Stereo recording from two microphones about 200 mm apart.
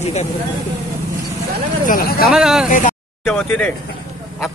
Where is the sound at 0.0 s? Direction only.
35° left (ahead or behind).